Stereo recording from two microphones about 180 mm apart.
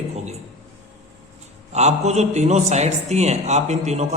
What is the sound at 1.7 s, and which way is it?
A man's voice, 40° right (ahead or behind).